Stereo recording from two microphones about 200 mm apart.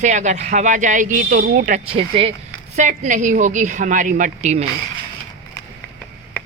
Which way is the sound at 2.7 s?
40° right (ahead or behind).